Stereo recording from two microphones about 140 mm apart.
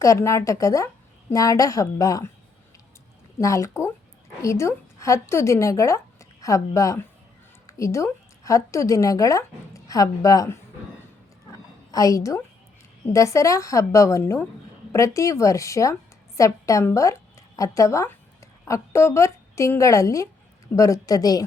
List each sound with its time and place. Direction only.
0.0 s a woman's voice: 20° left (ahead or behind)
3.3 s a woman's voice: 20° left (ahead or behind)
11.9 s a woman's voice: 25° left (ahead or behind)